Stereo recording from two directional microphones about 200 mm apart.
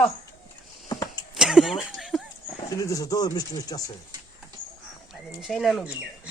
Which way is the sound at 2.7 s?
15° left (ahead or behind).